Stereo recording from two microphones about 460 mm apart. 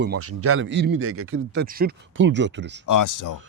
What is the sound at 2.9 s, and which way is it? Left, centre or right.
Speech, left.